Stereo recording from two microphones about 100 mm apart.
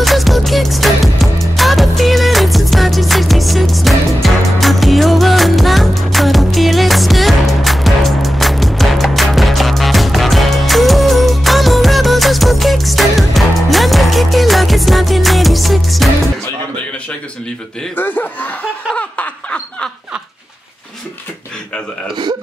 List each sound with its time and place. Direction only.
0.0 s music: centre (ahead or behind)
17.9 s chuckle: 20° left (ahead or behind)
18.9 s laughter: 15° left (ahead or behind)